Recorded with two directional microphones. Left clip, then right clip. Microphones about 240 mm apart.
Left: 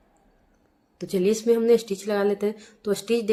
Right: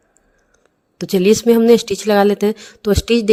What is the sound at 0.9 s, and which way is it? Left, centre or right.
A woman's voice, right.